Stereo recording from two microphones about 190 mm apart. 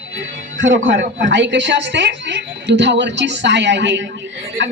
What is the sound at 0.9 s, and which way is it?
Speech, 45° right (ahead or behind).